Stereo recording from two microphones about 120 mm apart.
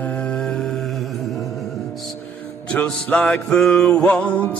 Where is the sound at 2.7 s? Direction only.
10° left (ahead or behind).